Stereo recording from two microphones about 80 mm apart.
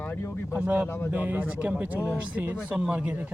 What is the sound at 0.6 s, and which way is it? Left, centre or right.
Speech, right.